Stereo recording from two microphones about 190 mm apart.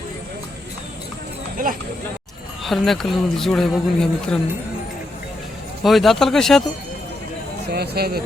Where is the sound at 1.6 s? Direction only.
45° right (ahead or behind).